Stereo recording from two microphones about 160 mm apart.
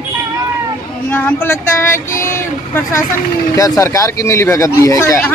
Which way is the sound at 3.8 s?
20° left (ahead or behind).